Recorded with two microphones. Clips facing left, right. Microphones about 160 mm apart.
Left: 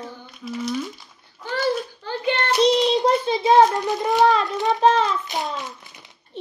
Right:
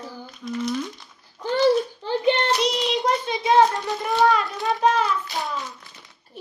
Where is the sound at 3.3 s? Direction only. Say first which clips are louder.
Left 2 dB; 30° left (ahead or behind).